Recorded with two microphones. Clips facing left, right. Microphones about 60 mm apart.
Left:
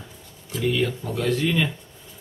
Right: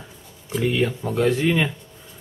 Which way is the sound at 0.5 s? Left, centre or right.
Right.